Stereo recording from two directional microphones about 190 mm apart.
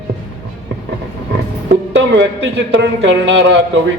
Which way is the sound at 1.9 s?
70° right (ahead or behind).